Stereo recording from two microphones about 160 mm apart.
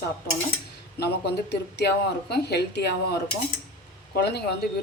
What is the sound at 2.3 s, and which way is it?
Speech, 90° left.